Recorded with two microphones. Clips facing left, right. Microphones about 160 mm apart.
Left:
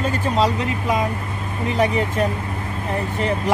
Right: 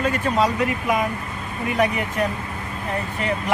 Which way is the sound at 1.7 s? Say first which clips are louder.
Left 2 dB; 25° left (ahead or behind).